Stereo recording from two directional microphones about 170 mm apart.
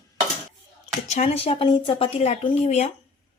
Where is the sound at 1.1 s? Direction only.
40° left (ahead or behind).